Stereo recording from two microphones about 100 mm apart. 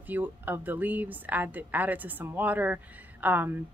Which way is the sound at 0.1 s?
15° right (ahead or behind).